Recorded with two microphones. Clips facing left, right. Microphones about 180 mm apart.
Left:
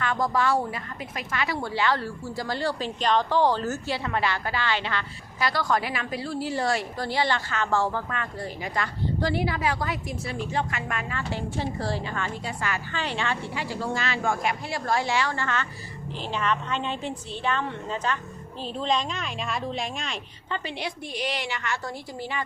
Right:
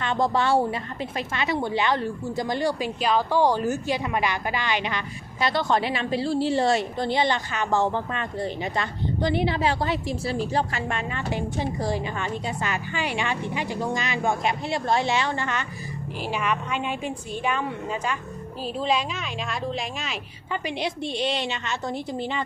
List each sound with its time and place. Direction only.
0.0 s a woman's voice: 25° right (ahead or behind); by 20.6 s 5° right (ahead or behind)
20.7 s a woman's voice: 20° right (ahead or behind)